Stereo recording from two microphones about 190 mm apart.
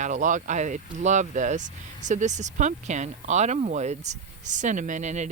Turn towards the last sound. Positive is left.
turn(degrees=-40)  # may be behind; listen again after turning